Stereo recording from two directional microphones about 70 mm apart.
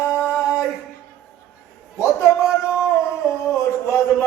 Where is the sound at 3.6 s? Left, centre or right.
Left.